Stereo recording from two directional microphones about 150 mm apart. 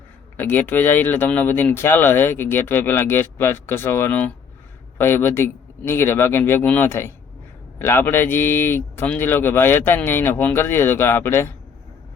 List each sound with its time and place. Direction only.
0.3 s speech: 15° left (ahead or behind)